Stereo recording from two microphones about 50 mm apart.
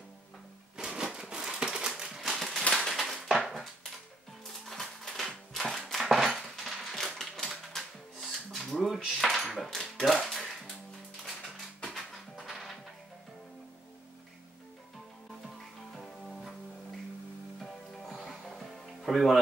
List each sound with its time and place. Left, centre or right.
0.7 s a sound: centre
2.3 s a sound: centre
7.7 s music: centre
11.9 s music: centre
16.0 s music: centre
17.6 s music: centre